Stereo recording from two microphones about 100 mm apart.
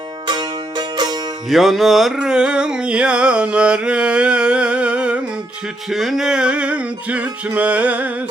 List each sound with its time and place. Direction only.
0.3 s music: 45° right (ahead or behind)
1.5 s music: centre (ahead or behind)